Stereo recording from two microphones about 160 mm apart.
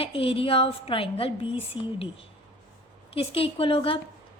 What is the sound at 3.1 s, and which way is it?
Speech, 35° left (ahead or behind).